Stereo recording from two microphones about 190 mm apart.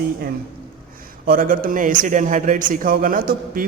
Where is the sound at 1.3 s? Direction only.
50° right (ahead or behind).